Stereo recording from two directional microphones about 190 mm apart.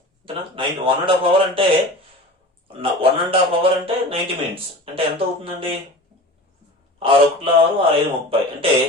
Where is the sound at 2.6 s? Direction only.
30° right (ahead or behind).